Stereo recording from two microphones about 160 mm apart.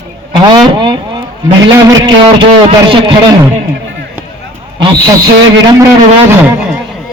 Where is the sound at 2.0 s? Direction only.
30° right (ahead or behind).